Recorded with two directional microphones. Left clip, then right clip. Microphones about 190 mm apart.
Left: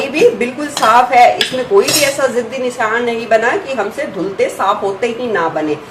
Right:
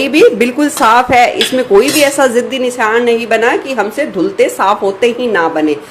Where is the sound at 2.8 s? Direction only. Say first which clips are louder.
Right 5 dB; 50° right (ahead or behind).